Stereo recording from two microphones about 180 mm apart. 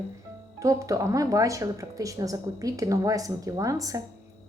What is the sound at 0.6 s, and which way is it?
Speech, 20° right (ahead or behind).